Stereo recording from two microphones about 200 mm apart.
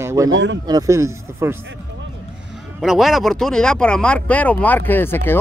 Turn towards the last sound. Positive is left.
turn(degrees=10)  # may be behind; listen again after turning